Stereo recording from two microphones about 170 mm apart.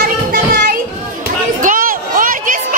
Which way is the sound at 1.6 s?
55° right (ahead or behind).